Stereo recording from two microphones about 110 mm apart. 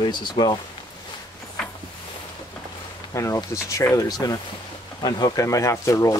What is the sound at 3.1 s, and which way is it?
Speech, 25° left (ahead or behind).